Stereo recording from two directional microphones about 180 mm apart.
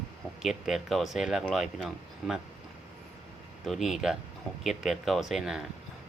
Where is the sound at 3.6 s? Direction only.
Centre (ahead or behind).